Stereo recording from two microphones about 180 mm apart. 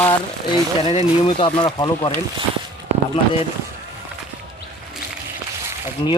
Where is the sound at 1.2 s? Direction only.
30° left (ahead or behind).